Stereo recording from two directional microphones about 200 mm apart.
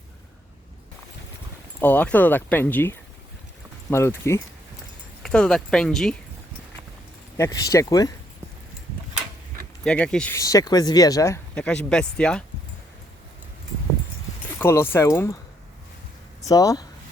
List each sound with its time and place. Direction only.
1.8 s speech: 10° left (ahead or behind)
7.3 s speech: 15° left (ahead or behind)
9.8 s speech: 5° left (ahead or behind)
11.6 s speech: 5° left (ahead or behind)
14.6 s speech: 10° left (ahead or behind)
16.4 s speech: 15° left (ahead or behind)